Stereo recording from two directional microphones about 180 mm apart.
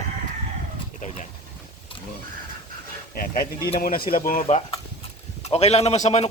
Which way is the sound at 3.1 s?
55° left (ahead or behind).